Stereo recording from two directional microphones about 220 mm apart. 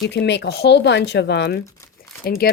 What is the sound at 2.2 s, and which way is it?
Speech, 45° left (ahead or behind).